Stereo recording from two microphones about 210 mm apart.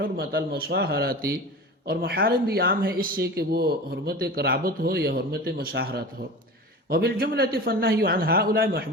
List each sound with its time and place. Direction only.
0.0 s speech: 45° right (ahead or behind)